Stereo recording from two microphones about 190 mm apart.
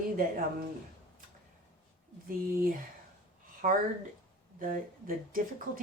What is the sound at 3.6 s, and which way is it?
Speech, 45° right (ahead or behind).